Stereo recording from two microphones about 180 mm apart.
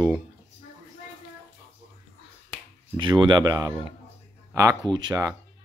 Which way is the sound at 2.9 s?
25° right (ahead or behind).